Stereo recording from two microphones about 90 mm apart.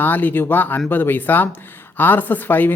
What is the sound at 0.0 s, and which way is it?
Speech, 20° left (ahead or behind).